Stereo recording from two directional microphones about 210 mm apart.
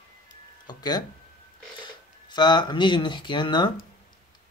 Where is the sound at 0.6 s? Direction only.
20° left (ahead or behind).